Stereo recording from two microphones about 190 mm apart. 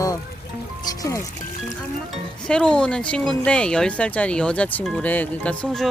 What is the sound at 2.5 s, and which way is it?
Speech, 5° left (ahead or behind).